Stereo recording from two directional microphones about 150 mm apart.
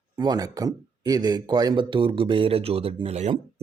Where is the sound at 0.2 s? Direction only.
25° right (ahead or behind).